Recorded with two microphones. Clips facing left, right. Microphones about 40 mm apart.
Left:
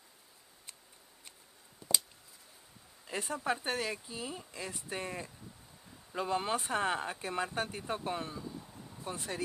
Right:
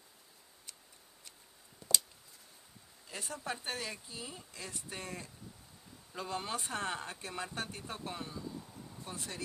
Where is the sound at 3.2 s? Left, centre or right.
Centre.